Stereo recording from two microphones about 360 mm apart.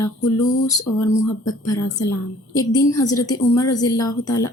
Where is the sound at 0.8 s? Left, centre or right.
Left.